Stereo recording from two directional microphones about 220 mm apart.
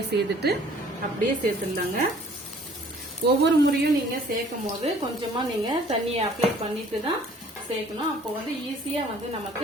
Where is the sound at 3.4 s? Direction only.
55° right (ahead or behind).